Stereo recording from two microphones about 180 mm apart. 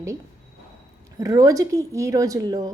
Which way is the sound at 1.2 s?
20° right (ahead or behind).